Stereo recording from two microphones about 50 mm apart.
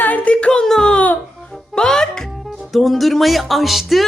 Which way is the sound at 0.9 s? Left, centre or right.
Left.